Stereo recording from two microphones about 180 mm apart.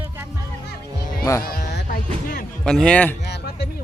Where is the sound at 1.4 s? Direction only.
55° left (ahead or behind).